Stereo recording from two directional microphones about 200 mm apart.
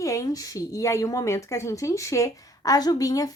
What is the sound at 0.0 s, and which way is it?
Speech, 15° left (ahead or behind).